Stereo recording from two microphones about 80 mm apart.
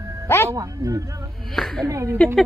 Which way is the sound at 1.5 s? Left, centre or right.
Centre.